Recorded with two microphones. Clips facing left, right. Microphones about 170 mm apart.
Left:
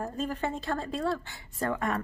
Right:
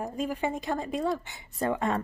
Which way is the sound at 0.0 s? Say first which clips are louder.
Right 2 dB; 10° right (ahead or behind).